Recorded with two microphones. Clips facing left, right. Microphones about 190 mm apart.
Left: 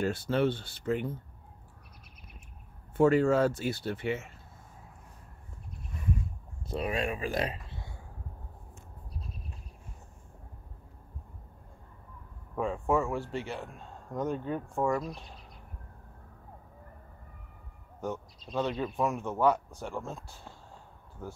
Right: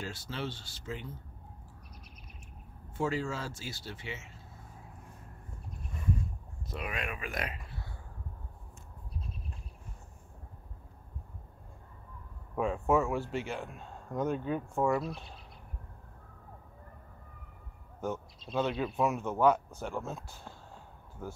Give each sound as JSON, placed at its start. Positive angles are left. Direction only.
{"t": 0.0, "sound": "speech", "side_deg": 55}
{"t": 3.0, "sound": "speech", "side_deg": 55}
{"t": 6.7, "sound": "speech", "side_deg": 30}
{"t": 12.5, "sound": "speech", "side_deg": -5}
{"t": 18.5, "sound": "speech", "side_deg": 0}